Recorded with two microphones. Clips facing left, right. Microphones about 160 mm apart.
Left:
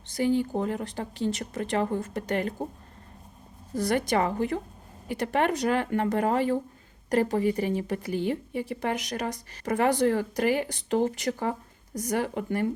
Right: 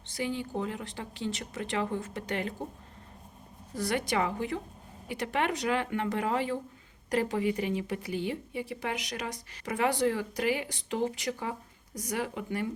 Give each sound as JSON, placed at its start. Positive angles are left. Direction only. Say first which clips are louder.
{"t": 0.1, "sound": "a woman's voice", "louder": "left 8 dB", "side_deg": 45}
{"t": 3.8, "sound": "a woman's voice", "louder": "left 5 dB", "side_deg": 45}